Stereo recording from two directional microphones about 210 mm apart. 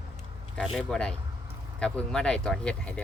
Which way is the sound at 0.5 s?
Centre (ahead or behind).